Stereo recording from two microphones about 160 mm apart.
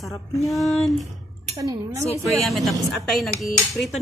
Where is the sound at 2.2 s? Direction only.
Centre (ahead or behind).